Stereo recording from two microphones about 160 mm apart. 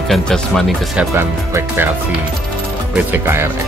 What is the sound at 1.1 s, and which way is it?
Speech, 15° right (ahead or behind).